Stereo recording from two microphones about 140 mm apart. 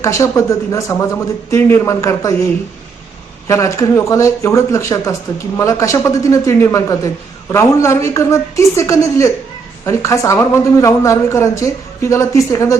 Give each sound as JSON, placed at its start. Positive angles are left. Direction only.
{"t": 0.0, "sound": "a woman's voice", "side_deg": 20}
{"t": 3.4, "sound": "a woman's voice", "side_deg": 20}